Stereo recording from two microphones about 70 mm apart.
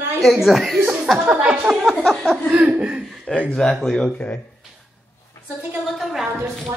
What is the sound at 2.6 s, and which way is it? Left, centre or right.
Speech, right.